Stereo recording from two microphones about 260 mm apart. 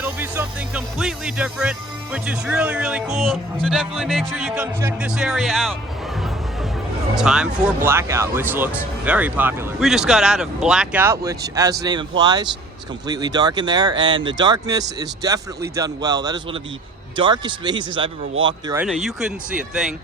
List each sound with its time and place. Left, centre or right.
0.0 s speech: centre
7.2 s speech: centre